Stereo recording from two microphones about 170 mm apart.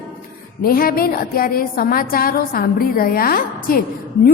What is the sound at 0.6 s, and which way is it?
A woman's voice, 60° left (ahead or behind).